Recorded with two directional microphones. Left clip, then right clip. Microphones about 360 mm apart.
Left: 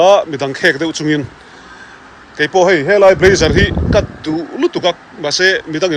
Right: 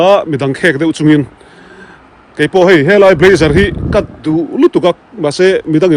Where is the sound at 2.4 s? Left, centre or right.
Right.